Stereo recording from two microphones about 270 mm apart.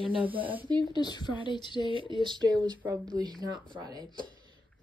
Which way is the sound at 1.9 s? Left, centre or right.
Centre.